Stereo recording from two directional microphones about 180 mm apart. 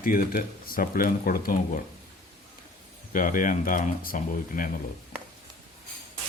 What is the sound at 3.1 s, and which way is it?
Speech, 50° left (ahead or behind).